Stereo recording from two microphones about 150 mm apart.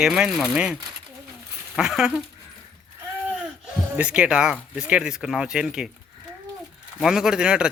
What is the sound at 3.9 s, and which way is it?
Speech, 10° right (ahead or behind).